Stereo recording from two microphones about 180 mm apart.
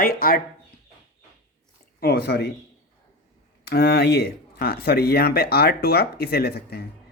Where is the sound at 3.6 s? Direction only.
65° left (ahead or behind).